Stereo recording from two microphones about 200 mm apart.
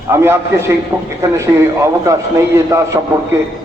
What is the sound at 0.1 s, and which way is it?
A man's voice, 10° right (ahead or behind).